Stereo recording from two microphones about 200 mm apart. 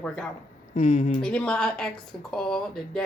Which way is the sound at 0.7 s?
30° left (ahead or behind).